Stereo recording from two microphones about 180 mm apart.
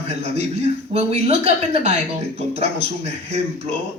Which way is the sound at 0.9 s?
35° right (ahead or behind).